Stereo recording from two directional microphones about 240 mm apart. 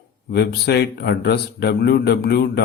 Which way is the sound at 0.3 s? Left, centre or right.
Left.